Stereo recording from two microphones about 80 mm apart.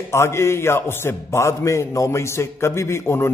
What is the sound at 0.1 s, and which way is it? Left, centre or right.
Speech, left.